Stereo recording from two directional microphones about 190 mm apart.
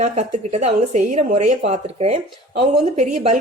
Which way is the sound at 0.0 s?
40° right (ahead or behind).